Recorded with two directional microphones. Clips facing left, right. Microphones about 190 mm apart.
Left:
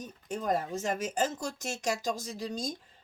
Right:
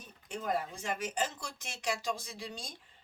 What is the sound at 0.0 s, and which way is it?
Speech, 40° left (ahead or behind).